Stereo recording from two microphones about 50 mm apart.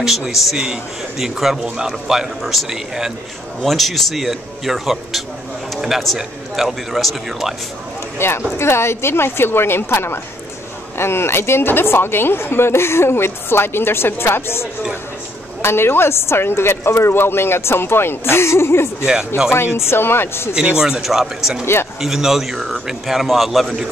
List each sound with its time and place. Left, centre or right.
0.3 s a man's voice: centre
8.2 s speech: left
19.0 s a man's voice: centre
19.5 s speech: left
20.5 s a man's voice: centre